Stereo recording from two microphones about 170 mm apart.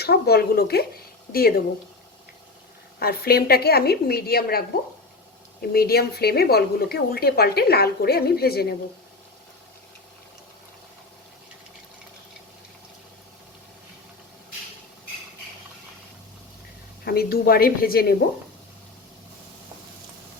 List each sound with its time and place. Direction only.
0.0 s a woman's voice: 70° left (ahead or behind)
3.0 s a woman's voice: 65° left (ahead or behind)
5.7 s speech: 65° left (ahead or behind)
17.1 s a woman's voice: 65° left (ahead or behind)